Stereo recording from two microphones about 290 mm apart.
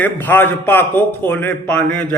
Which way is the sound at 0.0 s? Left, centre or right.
Centre.